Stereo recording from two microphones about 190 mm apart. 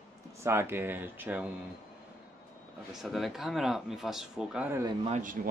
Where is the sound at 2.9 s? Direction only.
Centre (ahead or behind).